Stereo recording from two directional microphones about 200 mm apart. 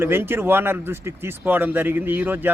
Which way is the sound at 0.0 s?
10° right (ahead or behind).